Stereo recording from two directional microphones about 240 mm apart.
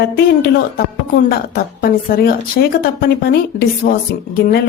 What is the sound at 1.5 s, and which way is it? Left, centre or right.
A woman's voice, left.